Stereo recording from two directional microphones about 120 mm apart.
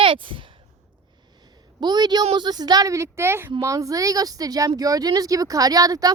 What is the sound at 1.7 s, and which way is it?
Speech, 35° right (ahead or behind).